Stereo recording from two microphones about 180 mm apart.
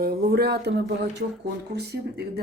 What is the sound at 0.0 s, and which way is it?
A woman's voice, 60° right (ahead or behind).